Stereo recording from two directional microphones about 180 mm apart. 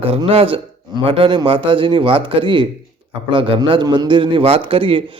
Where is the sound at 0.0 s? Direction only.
30° right (ahead or behind).